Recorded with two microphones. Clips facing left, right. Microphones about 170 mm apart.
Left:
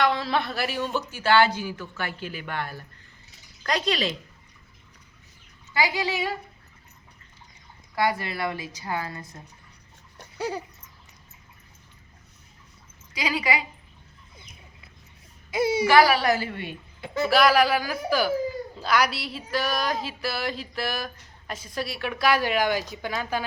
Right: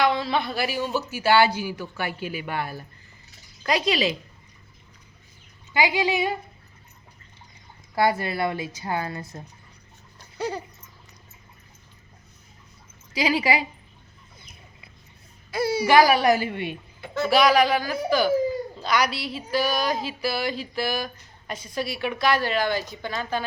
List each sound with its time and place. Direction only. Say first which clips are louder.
0.0 s speech: right 1 dB; centre (ahead or behind)
5.7 s speech: right 3 dB; 15° right (ahead or behind)
7.9 s a woman's voice: right 3 dB; 30° right (ahead or behind)
10.3 s dog: right 1 dB; 10° left (ahead or behind)
13.1 s a woman's voice: right 4 dB; 30° right (ahead or behind)
15.4 s speech: left 1 dB; 20° left (ahead or behind)
15.9 s speech: right 3 dB; 20° right (ahead or behind)
17.2 s a sound: right 1 dB; centre (ahead or behind)